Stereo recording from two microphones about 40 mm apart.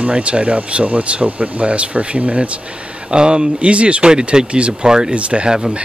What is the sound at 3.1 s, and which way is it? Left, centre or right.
Speech, right.